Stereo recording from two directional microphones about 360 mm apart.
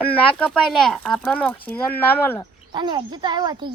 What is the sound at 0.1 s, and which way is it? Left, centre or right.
Speech, centre.